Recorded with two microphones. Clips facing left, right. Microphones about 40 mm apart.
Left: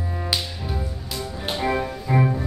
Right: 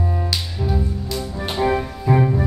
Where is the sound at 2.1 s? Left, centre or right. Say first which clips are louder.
Right 4 dB; centre.